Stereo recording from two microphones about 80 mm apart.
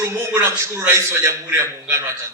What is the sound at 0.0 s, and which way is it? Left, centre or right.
Speech, right.